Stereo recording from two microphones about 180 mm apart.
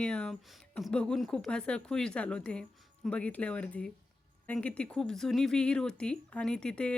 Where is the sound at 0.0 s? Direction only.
5° left (ahead or behind).